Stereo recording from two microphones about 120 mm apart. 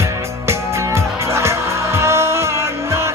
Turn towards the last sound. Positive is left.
turn(degrees=-25)  # may be behind; listen again after turning